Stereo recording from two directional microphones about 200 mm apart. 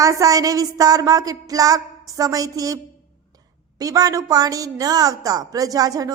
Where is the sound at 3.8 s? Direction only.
15° right (ahead or behind).